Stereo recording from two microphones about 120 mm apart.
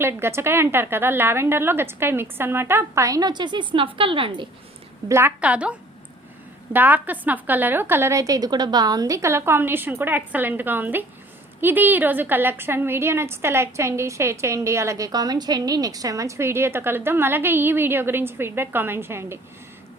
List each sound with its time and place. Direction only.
0.0 s a woman's voice: 20° right (ahead or behind); by 4.4 s 45° right (ahead or behind)
5.0 s a woman's voice: 25° right (ahead or behind)
5.4 s a woman's voice: 10° right (ahead or behind)
6.7 s a woman's voice: 15° right (ahead or behind)